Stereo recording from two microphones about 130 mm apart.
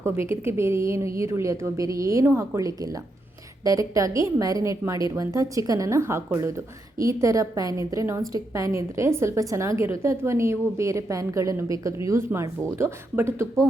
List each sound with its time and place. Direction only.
0.0 s a woman's voice: 20° right (ahead or behind)